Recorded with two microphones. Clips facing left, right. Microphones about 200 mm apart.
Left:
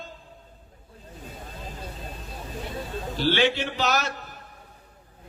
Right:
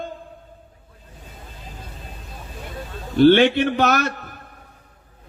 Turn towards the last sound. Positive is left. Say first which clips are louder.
# right 5 dB
turn(degrees=-55)  # may be behind; listen again after turning